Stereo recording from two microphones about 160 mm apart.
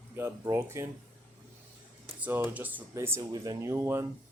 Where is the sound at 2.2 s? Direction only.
10° right (ahead or behind).